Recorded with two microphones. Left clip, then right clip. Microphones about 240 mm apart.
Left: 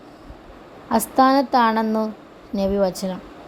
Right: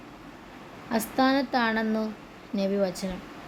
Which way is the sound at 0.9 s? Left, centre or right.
Left.